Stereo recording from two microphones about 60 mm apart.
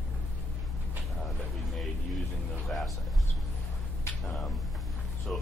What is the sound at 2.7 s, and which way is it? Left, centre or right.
Music, centre.